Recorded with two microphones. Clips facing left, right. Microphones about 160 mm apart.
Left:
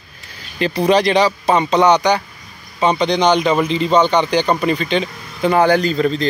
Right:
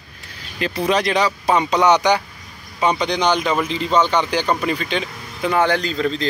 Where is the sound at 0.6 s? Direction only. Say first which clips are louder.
Left 5 dB; 5° right (ahead or behind).